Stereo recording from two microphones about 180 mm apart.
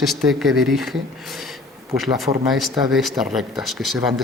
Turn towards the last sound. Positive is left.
turn(degrees=0)  # may be behind; listen again after turning